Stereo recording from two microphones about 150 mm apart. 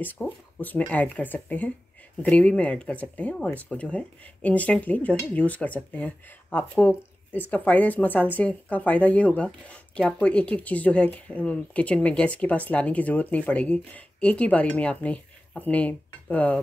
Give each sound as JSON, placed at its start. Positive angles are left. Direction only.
{"t": 0.0, "sound": "speech", "side_deg": 10}